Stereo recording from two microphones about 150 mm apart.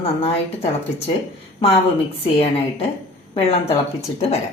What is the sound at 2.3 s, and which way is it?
Speech, 40° left (ahead or behind).